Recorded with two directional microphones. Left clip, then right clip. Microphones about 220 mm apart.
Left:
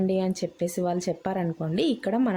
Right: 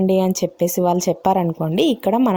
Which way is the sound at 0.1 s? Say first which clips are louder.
Right 9 dB; 30° right (ahead or behind).